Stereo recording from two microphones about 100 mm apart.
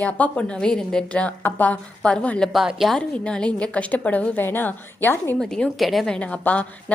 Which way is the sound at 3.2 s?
10° left (ahead or behind).